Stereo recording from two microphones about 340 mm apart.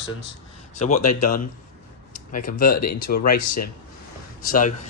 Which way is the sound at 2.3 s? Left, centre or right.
Left.